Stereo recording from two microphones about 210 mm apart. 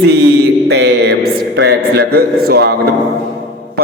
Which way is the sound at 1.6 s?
50° right (ahead or behind).